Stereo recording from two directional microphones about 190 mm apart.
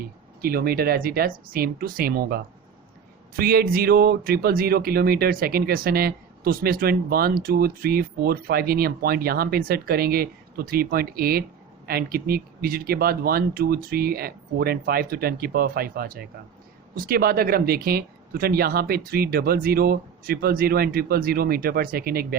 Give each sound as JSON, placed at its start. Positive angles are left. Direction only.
{"t": 0.4, "sound": "speech", "side_deg": -50}